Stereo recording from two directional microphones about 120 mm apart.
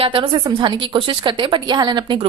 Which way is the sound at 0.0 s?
45° right (ahead or behind).